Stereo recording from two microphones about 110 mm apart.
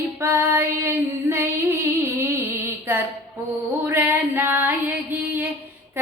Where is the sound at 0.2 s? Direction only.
25° right (ahead or behind).